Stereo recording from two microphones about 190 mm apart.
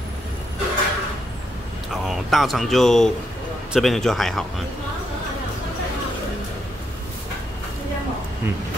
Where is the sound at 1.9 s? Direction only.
Centre (ahead or behind).